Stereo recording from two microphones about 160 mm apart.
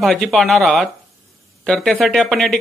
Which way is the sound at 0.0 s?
Centre (ahead or behind).